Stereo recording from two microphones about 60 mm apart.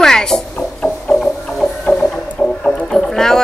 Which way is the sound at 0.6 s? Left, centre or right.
Centre.